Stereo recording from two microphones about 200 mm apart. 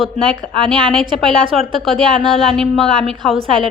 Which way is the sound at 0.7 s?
5° left (ahead or behind).